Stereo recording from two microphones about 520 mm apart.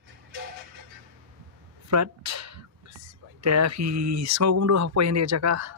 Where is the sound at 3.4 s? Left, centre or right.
Right.